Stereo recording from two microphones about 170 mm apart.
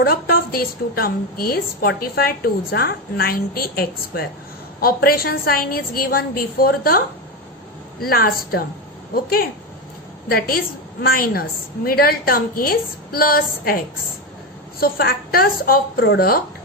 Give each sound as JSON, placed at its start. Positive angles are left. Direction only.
{"t": 0.0, "sound": "a woman's voice", "side_deg": 60}
{"t": 8.0, "sound": "a woman's voice", "side_deg": 60}
{"t": 10.2, "sound": "a woman's voice", "side_deg": 60}